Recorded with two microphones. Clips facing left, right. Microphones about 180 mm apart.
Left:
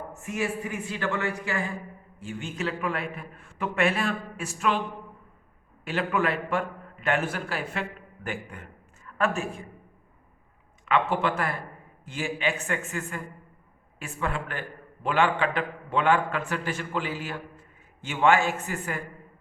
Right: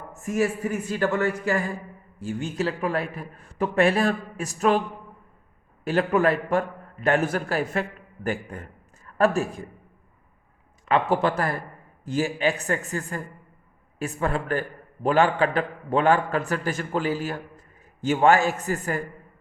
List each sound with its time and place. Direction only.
0.2 s a man's voice: 40° right (ahead or behind)
5.8 s a man's voice: 40° right (ahead or behind)
10.8 s a man's voice: 40° right (ahead or behind)